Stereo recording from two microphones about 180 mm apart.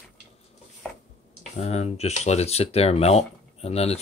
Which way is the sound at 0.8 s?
5° left (ahead or behind).